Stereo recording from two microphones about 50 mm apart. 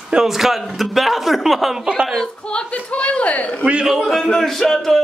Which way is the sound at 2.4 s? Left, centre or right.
Left.